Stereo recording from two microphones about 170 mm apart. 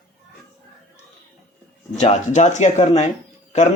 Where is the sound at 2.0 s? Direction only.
45° left (ahead or behind).